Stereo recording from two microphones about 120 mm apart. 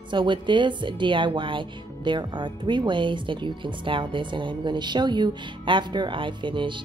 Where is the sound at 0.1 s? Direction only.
40° right (ahead or behind).